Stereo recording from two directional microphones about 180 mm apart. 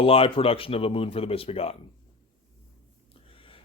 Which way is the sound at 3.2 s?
30° left (ahead or behind).